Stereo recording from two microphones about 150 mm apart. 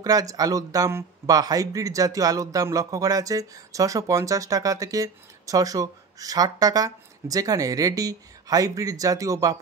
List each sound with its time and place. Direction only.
0.0 s speech: 25° right (ahead or behind)